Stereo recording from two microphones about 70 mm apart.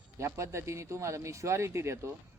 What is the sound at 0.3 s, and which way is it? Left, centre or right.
Speech, right.